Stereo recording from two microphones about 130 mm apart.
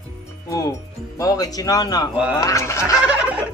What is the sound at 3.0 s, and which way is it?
Turkey, 10° right (ahead or behind).